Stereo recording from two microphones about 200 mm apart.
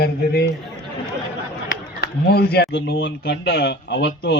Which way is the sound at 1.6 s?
50° left (ahead or behind).